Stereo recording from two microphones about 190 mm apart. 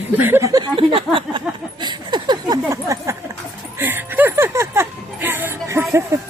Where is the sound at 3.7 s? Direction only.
10° right (ahead or behind).